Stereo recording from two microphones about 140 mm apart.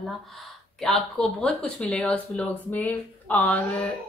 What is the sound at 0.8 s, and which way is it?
A woman's voice, centre (ahead or behind).